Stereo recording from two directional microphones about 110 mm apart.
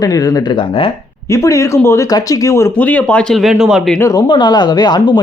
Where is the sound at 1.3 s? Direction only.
30° left (ahead or behind).